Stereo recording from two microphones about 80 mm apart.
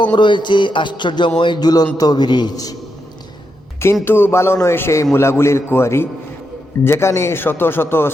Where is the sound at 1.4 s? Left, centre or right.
Left.